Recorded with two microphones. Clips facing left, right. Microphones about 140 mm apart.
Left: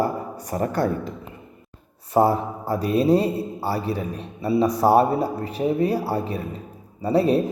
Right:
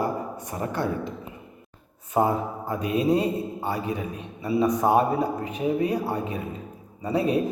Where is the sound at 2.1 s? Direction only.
35° left (ahead or behind).